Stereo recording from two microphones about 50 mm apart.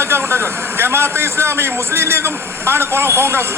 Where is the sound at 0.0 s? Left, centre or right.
Right.